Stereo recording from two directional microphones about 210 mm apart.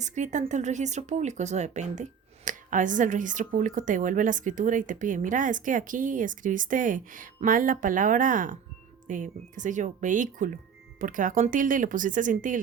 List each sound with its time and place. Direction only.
0.0 s speech: 35° right (ahead or behind)